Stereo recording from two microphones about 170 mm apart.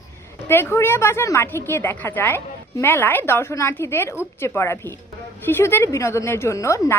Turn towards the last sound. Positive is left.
turn(degrees=15)  # may be behind; listen again after turning